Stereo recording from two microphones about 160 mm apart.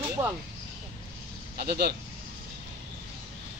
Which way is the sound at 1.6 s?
90° right.